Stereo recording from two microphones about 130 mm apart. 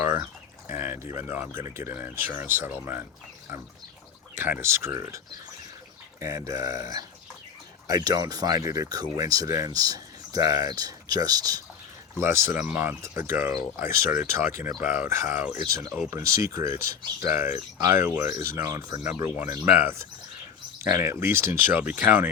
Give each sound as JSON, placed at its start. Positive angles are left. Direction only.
{"t": 0.7, "sound": "a sound", "side_deg": -15}
{"t": 1.1, "sound": "speech", "side_deg": -20}
{"t": 4.4, "sound": "speech", "side_deg": -15}